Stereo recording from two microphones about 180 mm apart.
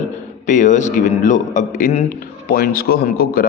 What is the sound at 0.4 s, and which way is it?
A man's voice, 45° left (ahead or behind).